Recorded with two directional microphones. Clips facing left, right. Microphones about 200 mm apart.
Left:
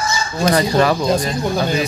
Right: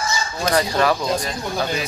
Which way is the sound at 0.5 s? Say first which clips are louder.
Left 2 dB; centre (ahead or behind).